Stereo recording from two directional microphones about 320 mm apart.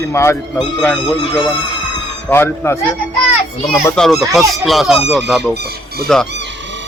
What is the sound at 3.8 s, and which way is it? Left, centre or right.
Speech, centre.